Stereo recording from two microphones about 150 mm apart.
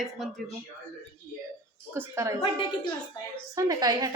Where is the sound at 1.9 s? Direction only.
20° right (ahead or behind).